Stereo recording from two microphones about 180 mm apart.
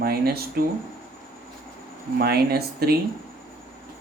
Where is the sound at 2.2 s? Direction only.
60° right (ahead or behind).